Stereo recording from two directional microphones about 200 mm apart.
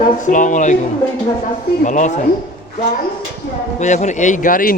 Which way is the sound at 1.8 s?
40° left (ahead or behind).